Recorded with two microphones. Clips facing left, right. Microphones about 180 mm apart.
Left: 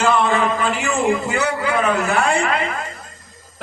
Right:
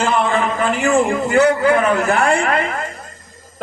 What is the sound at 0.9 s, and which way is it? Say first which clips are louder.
A man's voice: right 4 dB; 50° right (ahead or behind).